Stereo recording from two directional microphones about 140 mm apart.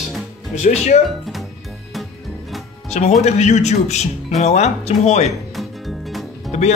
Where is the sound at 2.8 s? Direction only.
55° left (ahead or behind).